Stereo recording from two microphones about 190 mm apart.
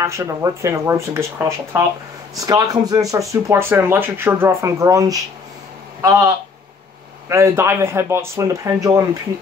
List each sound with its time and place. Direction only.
0.0 s speech: 15° right (ahead or behind)